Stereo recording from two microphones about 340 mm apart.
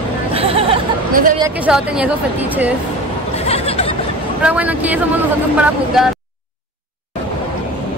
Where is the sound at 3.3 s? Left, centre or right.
Centre.